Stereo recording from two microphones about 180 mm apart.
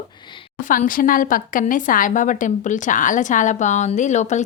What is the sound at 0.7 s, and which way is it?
A woman's voice, 50° left (ahead or behind).